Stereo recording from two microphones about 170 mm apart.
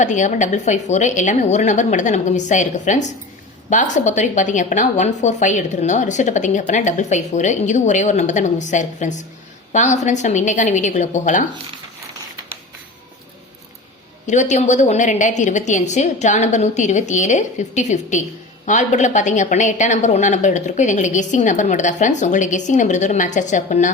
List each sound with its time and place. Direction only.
0.0 s a woman's voice: 45° left (ahead or behind)
14.3 s a woman's voice: 45° left (ahead or behind)